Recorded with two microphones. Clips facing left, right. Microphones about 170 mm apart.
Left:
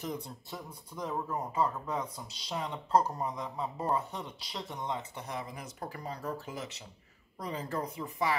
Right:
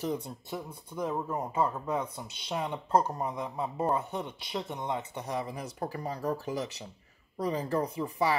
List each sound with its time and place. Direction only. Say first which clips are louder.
0.0 s speech: right 5 dB; 30° right (ahead or behind)